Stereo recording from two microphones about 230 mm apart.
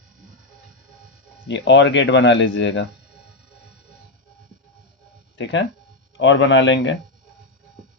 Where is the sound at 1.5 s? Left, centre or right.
Left.